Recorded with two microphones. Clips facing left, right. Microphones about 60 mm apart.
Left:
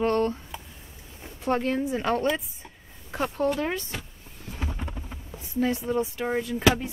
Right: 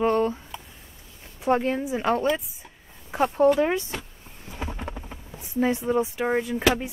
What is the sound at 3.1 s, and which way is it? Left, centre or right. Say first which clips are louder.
Speech: right 7 dB; centre.